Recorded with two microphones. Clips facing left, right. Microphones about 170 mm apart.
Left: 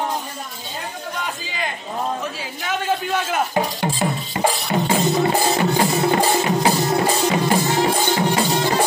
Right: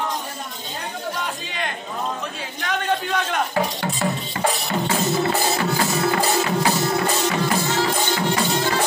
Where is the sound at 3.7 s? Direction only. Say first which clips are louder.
Left 2 dB; 25° left (ahead or behind).